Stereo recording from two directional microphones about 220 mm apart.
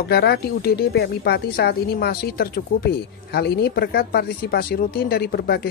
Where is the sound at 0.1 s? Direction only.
45° left (ahead or behind).